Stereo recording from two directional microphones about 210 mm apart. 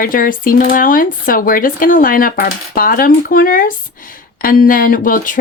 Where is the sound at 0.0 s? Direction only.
40° left (ahead or behind).